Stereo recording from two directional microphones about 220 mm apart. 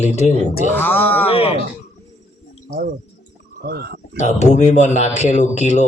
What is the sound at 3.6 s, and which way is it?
Speech, 45° right (ahead or behind).